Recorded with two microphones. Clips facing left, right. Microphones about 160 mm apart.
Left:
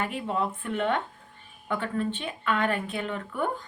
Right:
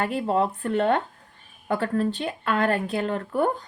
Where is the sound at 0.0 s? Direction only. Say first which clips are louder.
Right 6 dB; 35° right (ahead or behind).